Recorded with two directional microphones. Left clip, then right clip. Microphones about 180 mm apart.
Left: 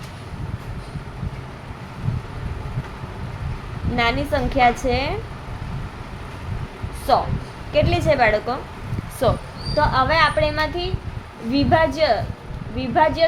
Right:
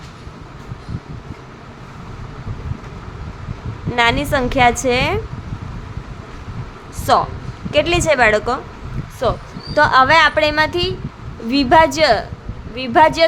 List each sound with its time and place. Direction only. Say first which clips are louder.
3.9 s a woman's voice: right 5 dB; 25° right (ahead or behind)
7.1 s a woman's voice: right 4 dB; 30° right (ahead or behind)
9.3 s speech: right 2 dB; 15° right (ahead or behind)
9.7 s a woman's voice: right 7 dB; 35° right (ahead or behind)